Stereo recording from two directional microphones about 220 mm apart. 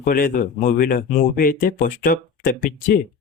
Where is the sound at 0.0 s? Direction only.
40° left (ahead or behind).